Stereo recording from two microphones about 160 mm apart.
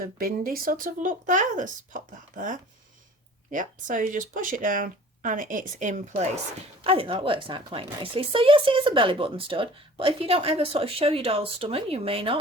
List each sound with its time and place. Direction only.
0.0 s speech: 65° right (ahead or behind); by 6.4 s 45° right (ahead or behind)
6.8 s a woman's voice: 35° right (ahead or behind)